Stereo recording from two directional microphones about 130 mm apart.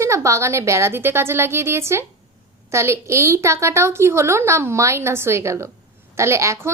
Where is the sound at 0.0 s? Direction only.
20° right (ahead or behind).